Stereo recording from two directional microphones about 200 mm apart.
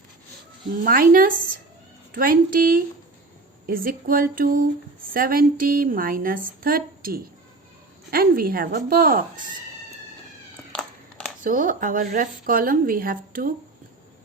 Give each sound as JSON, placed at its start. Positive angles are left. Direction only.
{"t": 0.9, "sound": "a woman's voice", "side_deg": -45}
{"t": 10.7, "sound": "cat", "side_deg": 5}
{"t": 11.4, "sound": "a woman's voice", "side_deg": -40}